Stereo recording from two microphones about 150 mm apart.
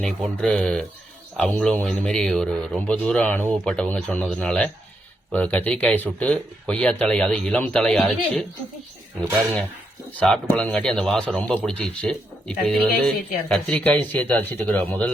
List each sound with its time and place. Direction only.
0.0 s a man's voice: 5° left (ahead or behind)
10.2 s a man's voice: 5° left (ahead or behind)